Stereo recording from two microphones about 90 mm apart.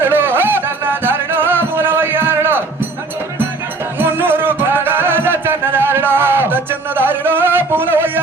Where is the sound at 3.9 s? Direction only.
25° right (ahead or behind).